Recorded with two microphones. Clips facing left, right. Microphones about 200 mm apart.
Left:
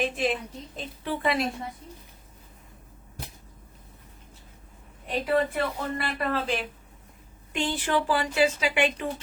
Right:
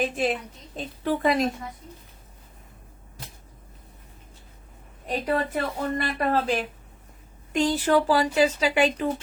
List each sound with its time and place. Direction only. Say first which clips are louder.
0.8 s a woman's voice: right 6 dB; 45° right (ahead or behind)
5.0 s a woman's voice: left 1 dB; 45° right (ahead or behind)